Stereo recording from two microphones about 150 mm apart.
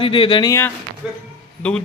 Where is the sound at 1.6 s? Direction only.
5° left (ahead or behind).